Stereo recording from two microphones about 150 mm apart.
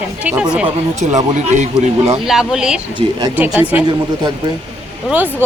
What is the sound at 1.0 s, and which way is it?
Speech, 50° right (ahead or behind).